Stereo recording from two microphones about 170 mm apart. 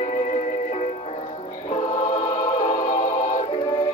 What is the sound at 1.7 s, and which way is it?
Choir, 40° left (ahead or behind).